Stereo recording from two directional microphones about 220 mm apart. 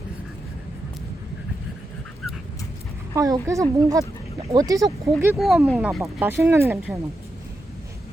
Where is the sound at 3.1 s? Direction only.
15° right (ahead or behind).